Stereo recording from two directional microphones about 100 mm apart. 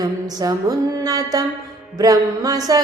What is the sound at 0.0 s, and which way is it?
Music, 40° right (ahead or behind).